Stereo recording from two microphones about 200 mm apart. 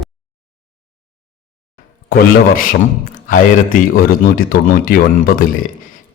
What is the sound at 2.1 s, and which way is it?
A man's voice, 45° left (ahead or behind).